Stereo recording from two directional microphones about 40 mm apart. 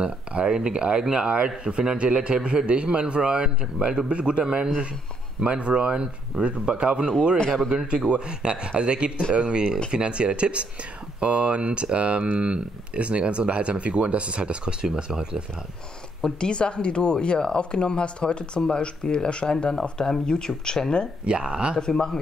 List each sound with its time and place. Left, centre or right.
0.0 s speech: right
8.1 s speech: right
16.3 s speech: left
21.3 s speech: right
21.7 s speech: centre